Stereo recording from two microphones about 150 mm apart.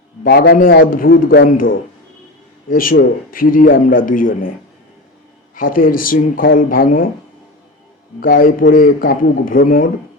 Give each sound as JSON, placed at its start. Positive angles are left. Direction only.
{"t": 0.3, "sound": "a man's voice", "side_deg": 90}
{"t": 5.5, "sound": "a man's voice", "side_deg": 70}
{"t": 8.2, "sound": "a man's voice", "side_deg": 70}